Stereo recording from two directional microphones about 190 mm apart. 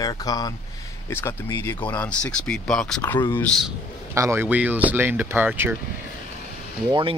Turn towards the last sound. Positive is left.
turn(degrees=-25)  # may be behind; listen again after turning